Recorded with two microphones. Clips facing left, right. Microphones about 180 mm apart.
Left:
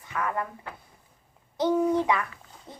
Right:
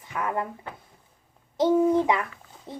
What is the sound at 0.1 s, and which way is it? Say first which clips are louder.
Speech: right 1 dB; 15° right (ahead or behind).